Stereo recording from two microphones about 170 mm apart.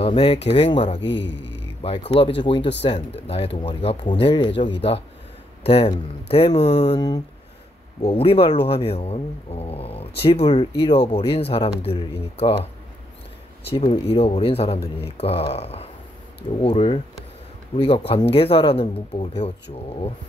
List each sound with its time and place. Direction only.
0.0 s speech: 35° left (ahead or behind)
1.0 s a man's voice: 90° left
1.8 s speech: 35° left (ahead or behind)
8.1 s speech: 35° left (ahead or behind)
13.8 s speech: 35° left (ahead or behind)